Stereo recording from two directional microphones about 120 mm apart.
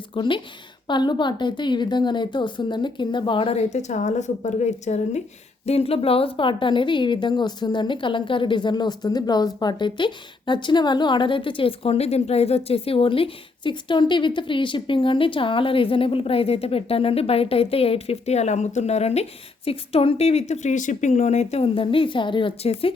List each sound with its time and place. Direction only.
0.1 s a woman's voice: 40° left (ahead or behind); by 5.2 s 70° left (ahead or behind)
5.6 s a woman's voice: 55° left (ahead or behind)